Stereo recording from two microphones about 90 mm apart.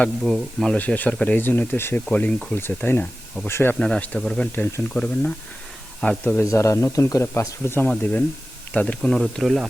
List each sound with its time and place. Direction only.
0.6 s speech: 10° left (ahead or behind)
2.0 s speech: 10° left (ahead or behind)
2.6 s speech: 25° left (ahead or behind)
3.8 s speech: 10° left (ahead or behind)
4.5 s speech: 20° left (ahead or behind)
6.4 s speech: 35° left (ahead or behind)
7.9 s speech: 15° left (ahead or behind)
9.0 s speech: centre (ahead or behind)